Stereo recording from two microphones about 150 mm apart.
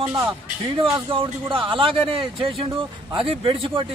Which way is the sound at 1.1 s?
35° right (ahead or behind).